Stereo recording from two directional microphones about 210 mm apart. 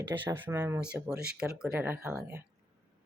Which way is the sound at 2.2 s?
15° right (ahead or behind).